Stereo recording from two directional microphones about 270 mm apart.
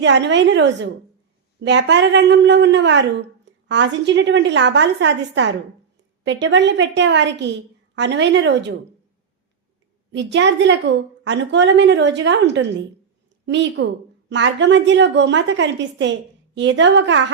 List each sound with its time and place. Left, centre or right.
0.0 s a woman's voice: right
10.1 s a woman's voice: right